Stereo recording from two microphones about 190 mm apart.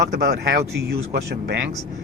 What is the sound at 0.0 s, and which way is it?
Speech, 60° right (ahead or behind).